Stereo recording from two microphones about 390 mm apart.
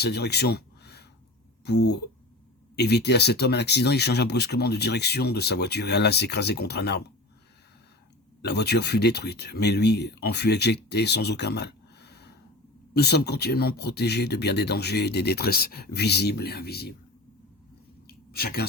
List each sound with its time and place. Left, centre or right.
0.0 s speech: left
8.4 s speech: left
18.3 s speech: left